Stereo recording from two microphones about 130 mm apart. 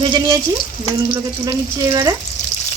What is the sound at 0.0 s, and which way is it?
Frying, 35° right (ahead or behind).